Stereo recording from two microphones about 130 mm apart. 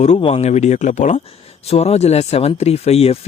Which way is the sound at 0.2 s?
50° left (ahead or behind).